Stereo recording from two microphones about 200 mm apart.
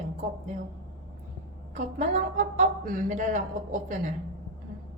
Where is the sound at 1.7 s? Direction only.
35° right (ahead or behind).